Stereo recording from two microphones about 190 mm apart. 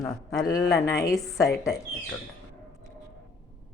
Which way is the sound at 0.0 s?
20° left (ahead or behind).